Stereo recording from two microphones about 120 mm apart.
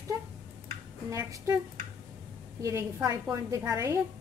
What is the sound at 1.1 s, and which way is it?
Speech, 25° right (ahead or behind).